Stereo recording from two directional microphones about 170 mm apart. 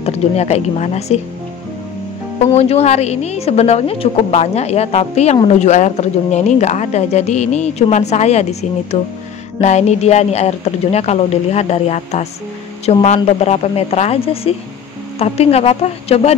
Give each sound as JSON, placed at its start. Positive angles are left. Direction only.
{"t": 0.0, "sound": "a woman's voice", "side_deg": 40}
{"t": 2.5, "sound": "a woman's voice", "side_deg": 40}